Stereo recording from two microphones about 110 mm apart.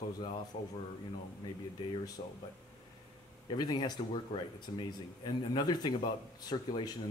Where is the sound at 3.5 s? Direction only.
40° left (ahead or behind).